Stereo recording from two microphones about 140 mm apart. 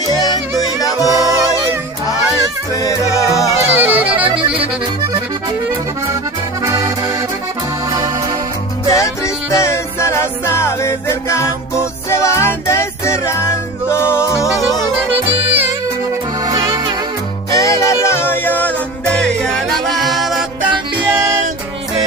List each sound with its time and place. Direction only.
0.0 s music: 30° left (ahead or behind)
1.1 s music: 20° right (ahead or behind)
2.7 s music: 25° left (ahead or behind)
3.4 s music: 15° right (ahead or behind)
6.6 s music: 25° right (ahead or behind)
8.9 s music: 20° left (ahead or behind)
15.2 s music: 10° right (ahead or behind)
16.4 s music: 30° right (ahead or behind)
17.5 s music: 25° left (ahead or behind); by 20.4 s centre (ahead or behind)